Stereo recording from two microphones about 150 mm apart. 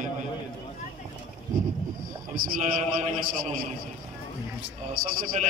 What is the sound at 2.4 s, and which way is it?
Speech, 70° right (ahead or behind).